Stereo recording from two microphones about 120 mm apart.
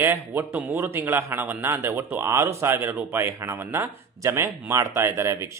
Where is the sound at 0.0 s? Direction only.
15° right (ahead or behind).